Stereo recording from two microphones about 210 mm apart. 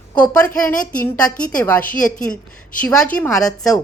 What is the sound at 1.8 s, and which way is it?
Speech, 40° left (ahead or behind).